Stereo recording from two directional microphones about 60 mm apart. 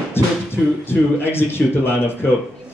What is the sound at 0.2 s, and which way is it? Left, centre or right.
Speech, left.